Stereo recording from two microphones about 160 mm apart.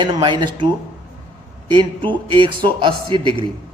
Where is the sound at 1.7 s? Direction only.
30° right (ahead or behind).